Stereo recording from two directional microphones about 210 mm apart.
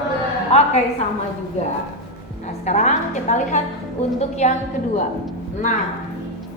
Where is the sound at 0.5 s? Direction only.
30° left (ahead or behind).